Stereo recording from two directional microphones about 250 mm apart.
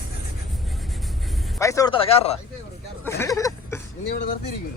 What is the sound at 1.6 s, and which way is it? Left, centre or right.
Speech, centre.